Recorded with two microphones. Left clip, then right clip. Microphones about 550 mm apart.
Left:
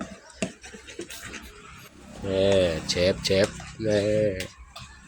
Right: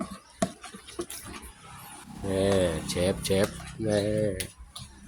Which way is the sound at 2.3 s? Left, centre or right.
Right.